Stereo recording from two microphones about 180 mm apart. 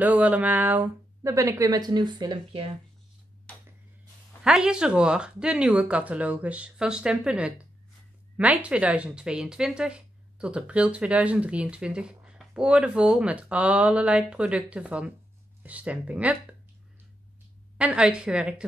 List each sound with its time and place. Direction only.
0.0 s speech: 10° right (ahead or behind); by 2.7 s 30° right (ahead or behind)
4.4 s speech: 5° right (ahead or behind)
17.7 s speech: 5° right (ahead or behind)